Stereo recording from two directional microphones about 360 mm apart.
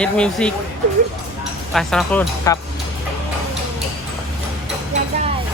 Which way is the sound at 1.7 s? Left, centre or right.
Centre.